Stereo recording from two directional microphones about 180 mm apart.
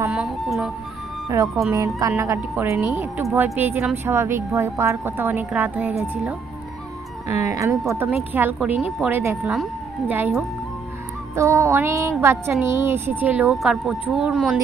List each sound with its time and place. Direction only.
0.1 s music: centre (ahead or behind)
1.7 s speech: 15° right (ahead or behind)
7.4 s speech: 15° right (ahead or behind)